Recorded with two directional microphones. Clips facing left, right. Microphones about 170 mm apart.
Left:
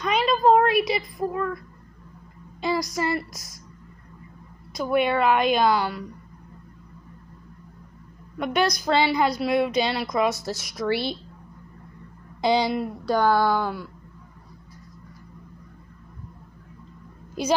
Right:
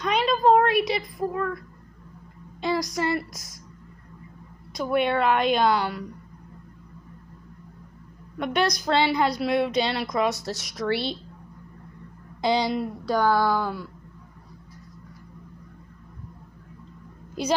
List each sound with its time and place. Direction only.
0.0 s a sound: centre (ahead or behind)
2.6 s a woman's voice: 5° left (ahead or behind)
4.7 s a woman's voice: 5° left (ahead or behind)
8.4 s a woman's voice: 5° left (ahead or behind)
12.4 s speech: 15° left (ahead or behind)
13.1 s a sound: 25° left (ahead or behind)